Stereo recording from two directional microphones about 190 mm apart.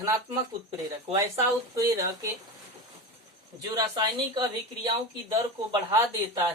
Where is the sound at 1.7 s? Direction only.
20° right (ahead or behind).